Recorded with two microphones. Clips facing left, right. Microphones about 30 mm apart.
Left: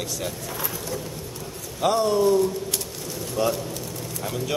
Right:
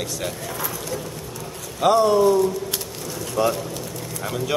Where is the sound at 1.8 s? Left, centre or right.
Centre.